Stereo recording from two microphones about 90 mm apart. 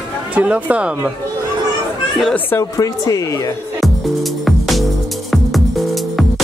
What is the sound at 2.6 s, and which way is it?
Speech, 40° left (ahead or behind).